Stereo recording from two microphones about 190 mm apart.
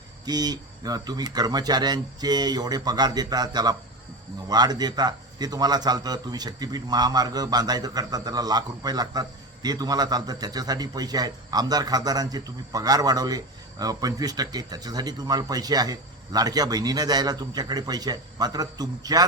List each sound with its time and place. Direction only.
0.3 s a man's voice: 20° right (ahead or behind)